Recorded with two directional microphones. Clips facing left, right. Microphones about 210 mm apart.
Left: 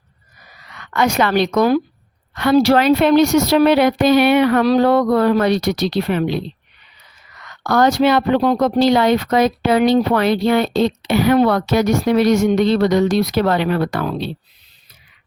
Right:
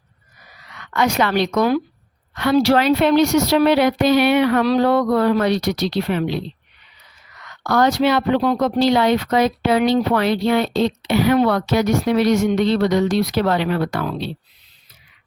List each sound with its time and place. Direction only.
0.9 s speech: 50° left (ahead or behind)
7.7 s speech: 45° left (ahead or behind)